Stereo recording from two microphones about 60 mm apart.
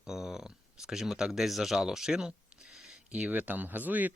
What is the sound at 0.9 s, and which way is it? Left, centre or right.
Speech, centre.